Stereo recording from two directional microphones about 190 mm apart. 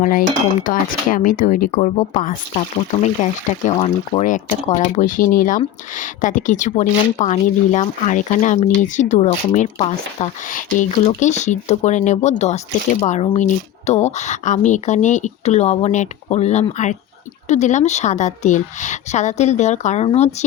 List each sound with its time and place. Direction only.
0.0 s speech: 45° left (ahead or behind)
2.5 s speech: 30° left (ahead or behind)
4.2 s speech: 40° left (ahead or behind)